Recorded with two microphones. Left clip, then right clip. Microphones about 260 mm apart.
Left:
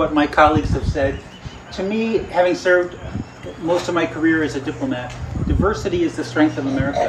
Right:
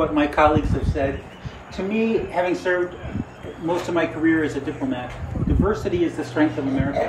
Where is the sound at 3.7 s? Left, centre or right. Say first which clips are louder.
Left 3 dB; centre.